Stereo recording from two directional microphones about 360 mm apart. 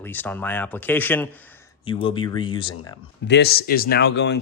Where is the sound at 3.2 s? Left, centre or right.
Left.